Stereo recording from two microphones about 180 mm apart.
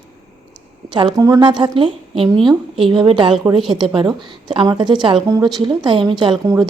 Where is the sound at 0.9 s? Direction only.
25° right (ahead or behind).